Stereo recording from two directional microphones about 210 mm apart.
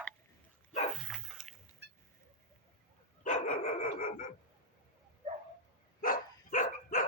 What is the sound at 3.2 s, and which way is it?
Dog, 40° left (ahead or behind).